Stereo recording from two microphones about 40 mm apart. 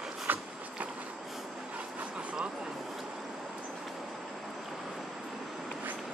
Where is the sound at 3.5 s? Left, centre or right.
Right.